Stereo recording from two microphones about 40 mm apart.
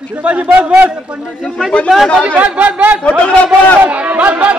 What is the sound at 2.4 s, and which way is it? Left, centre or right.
Speech, right.